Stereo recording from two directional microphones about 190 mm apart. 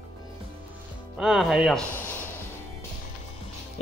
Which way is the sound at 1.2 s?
Centre (ahead or behind).